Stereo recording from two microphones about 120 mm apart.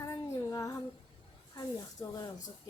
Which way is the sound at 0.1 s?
30° left (ahead or behind).